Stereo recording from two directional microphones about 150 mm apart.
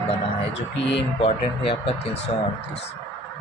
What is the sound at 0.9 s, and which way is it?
Speech, 40° left (ahead or behind).